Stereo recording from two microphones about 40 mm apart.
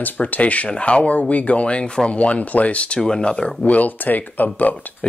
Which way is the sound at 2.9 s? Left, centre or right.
Centre.